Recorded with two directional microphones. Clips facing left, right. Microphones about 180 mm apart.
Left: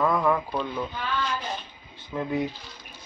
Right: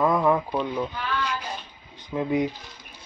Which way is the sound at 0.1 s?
15° right (ahead or behind).